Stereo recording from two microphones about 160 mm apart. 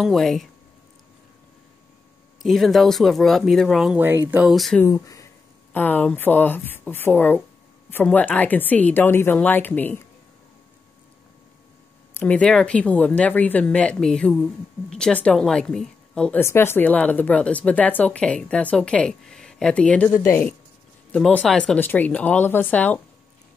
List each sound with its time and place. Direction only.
0.0 s speech: centre (ahead or behind)
2.4 s speech: centre (ahead or behind)
4.0 s speech: 15° right (ahead or behind)
4.8 s a sound: 20° left (ahead or behind)
5.8 s speech: 10° left (ahead or behind)
12.1 s speech: 10° left (ahead or behind)
21.1 s speech: 10° left (ahead or behind)